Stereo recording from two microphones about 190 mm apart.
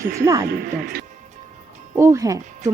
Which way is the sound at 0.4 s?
55° right (ahead or behind).